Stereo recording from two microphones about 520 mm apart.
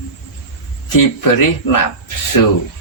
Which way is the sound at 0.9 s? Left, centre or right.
Left.